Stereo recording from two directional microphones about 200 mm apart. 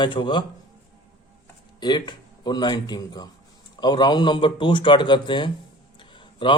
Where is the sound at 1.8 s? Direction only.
20° left (ahead or behind).